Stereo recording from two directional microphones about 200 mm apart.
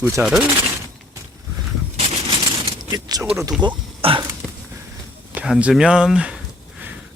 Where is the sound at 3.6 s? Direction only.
25° right (ahead or behind).